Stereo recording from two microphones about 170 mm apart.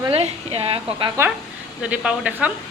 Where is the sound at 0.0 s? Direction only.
35° right (ahead or behind).